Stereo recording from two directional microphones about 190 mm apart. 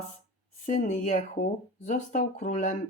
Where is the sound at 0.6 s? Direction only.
40° left (ahead or behind).